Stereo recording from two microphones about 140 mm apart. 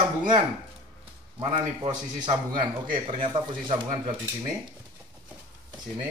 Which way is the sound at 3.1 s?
35° right (ahead or behind).